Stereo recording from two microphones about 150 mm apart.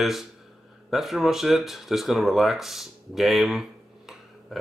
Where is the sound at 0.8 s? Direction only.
Centre (ahead or behind).